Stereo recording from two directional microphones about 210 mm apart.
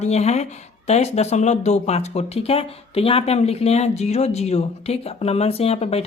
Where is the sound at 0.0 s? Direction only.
30° left (ahead or behind).